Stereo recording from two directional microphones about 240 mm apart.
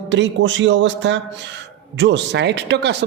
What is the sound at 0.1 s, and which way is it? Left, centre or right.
Speech, right.